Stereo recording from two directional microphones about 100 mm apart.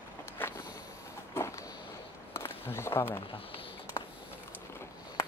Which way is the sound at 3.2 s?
70° left (ahead or behind).